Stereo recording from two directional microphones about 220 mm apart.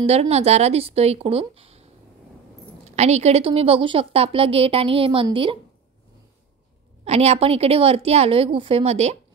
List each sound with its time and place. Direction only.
0.0 s a woman's voice: 30° right (ahead or behind)
7.1 s a woman's voice: 30° right (ahead or behind)